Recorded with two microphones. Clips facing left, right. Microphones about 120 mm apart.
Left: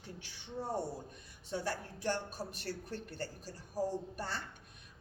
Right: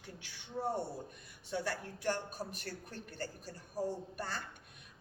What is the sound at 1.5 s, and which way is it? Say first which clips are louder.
Speech: even; 40° left (ahead or behind).